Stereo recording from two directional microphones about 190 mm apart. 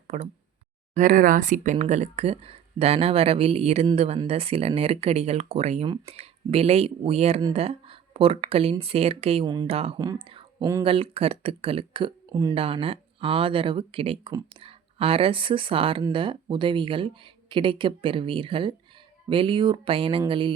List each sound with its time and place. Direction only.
0.1 s speech: 35° right (ahead or behind); by 12.5 s 20° right (ahead or behind)
12.5 s speech: 30° right (ahead or behind)